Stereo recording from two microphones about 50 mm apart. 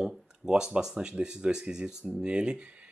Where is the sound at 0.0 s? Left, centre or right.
Centre.